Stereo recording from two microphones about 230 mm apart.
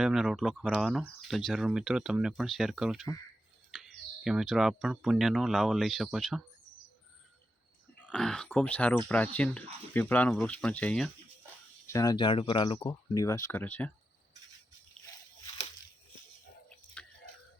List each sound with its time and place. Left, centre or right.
0.0 s speech: centre
8.0 s speech: centre
11.9 s speech: centre
17.0 s a sound: centre